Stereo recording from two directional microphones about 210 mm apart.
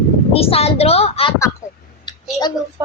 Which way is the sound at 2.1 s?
20° left (ahead or behind).